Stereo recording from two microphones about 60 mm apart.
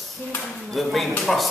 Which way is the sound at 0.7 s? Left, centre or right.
Centre.